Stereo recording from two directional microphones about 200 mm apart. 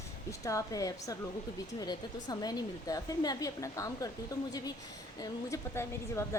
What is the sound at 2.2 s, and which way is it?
A woman's voice, 20° left (ahead or behind).